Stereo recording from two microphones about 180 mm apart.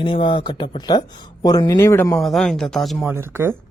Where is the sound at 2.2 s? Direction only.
Centre (ahead or behind).